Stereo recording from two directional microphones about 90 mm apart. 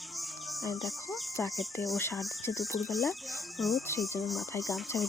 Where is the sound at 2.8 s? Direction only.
Centre (ahead or behind).